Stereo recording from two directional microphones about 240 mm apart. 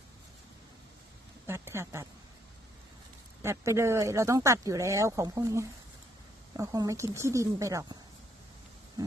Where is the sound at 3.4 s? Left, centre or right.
Centre.